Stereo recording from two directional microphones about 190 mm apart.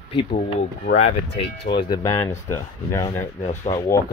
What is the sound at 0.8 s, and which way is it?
Speech, 45° left (ahead or behind).